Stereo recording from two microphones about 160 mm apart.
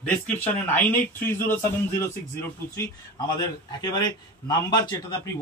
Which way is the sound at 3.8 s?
25° left (ahead or behind).